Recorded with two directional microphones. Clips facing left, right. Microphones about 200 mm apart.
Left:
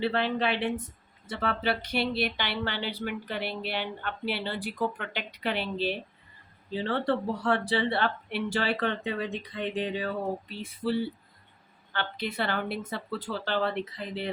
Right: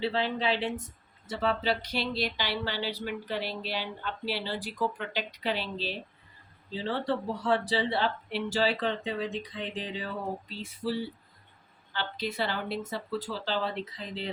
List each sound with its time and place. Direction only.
0.0 s speech: 60° left (ahead or behind)